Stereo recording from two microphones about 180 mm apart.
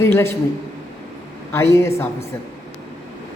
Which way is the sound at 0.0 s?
15° left (ahead or behind).